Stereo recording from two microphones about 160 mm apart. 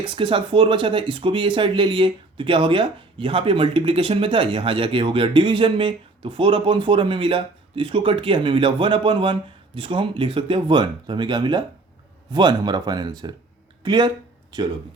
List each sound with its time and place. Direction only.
0.0 s speech: 30° right (ahead or behind)